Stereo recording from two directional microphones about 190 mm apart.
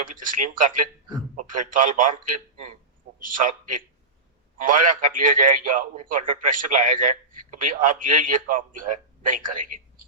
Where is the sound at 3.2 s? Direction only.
45° right (ahead or behind).